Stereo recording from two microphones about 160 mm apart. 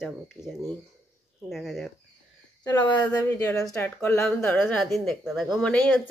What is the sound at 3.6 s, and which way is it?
Speech, 5° left (ahead or behind).